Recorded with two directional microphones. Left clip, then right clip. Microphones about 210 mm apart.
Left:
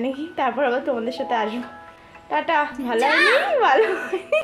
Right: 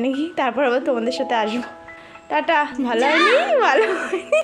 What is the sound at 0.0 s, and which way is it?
A child's voice, 30° right (ahead or behind).